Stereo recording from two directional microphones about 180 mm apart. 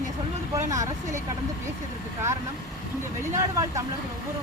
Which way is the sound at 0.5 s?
20° right (ahead or behind).